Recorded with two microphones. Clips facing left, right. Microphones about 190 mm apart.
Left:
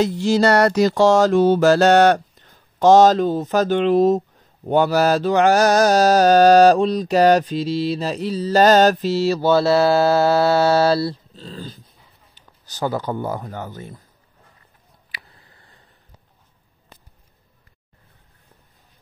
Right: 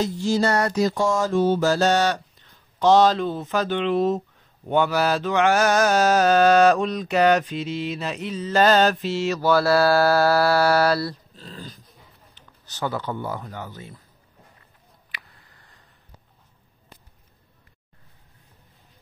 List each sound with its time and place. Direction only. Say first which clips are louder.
0.0 s music: left 5 dB; 70° left (ahead or behind); by 4.2 s 40° left (ahead or behind)
4.6 s mantra: left 4 dB; 40° left (ahead or behind)
12.6 s speech: left 4 dB; 40° left (ahead or behind)